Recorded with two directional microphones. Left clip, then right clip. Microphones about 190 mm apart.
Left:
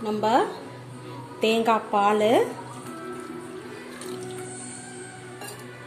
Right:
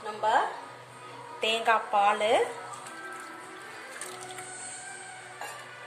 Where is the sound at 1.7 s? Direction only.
15° left (ahead or behind).